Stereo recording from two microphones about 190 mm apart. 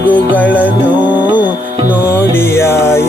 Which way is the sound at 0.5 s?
10° right (ahead or behind).